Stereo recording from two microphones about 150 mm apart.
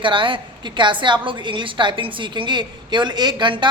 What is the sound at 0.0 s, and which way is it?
A woman's voice, 35° right (ahead or behind).